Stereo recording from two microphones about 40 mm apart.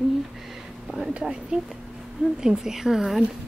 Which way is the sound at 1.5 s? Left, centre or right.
Right.